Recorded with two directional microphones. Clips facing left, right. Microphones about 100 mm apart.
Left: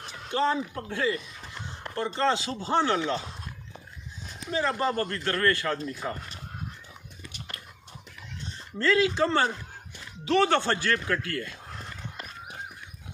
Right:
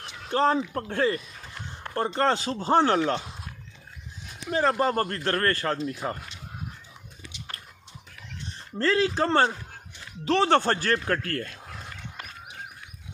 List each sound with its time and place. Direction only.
0.3 s speech: 40° right (ahead or behind)
4.5 s speech: 45° right (ahead or behind)
8.7 s speech: 35° right (ahead or behind)